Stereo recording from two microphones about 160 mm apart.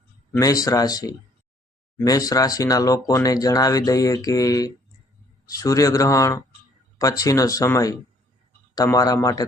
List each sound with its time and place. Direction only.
0.3 s speech: 20° left (ahead or behind)